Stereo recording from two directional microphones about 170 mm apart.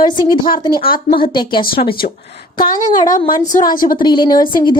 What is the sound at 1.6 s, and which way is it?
Speech, 60° left (ahead or behind).